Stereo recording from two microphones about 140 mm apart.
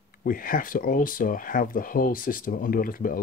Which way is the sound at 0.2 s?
90° left.